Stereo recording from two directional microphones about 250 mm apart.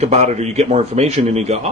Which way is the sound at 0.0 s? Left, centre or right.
Right.